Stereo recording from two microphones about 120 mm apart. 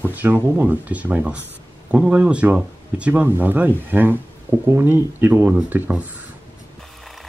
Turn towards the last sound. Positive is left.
turn(degrees=-15)  # may be behind; listen again after turning